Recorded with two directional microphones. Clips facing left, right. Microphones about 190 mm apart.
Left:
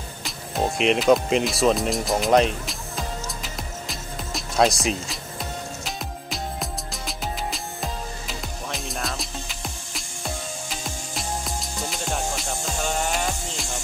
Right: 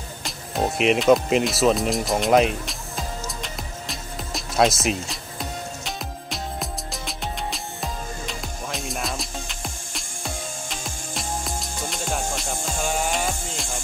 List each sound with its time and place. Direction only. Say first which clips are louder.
0.2 s speech: right 1 dB; centre (ahead or behind)
3.4 s music: even; centre (ahead or behind)